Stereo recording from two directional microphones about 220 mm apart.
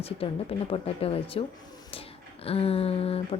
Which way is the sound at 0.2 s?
25° left (ahead or behind).